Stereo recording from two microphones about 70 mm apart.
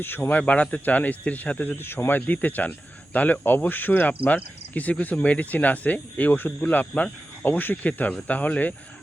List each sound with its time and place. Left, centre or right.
0.0 s speech: left